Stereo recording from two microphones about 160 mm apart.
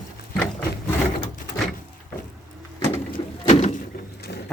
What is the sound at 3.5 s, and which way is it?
Door, 40° left (ahead or behind).